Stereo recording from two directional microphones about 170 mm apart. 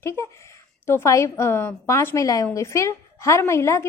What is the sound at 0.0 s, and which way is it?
A woman's voice, 15° left (ahead or behind).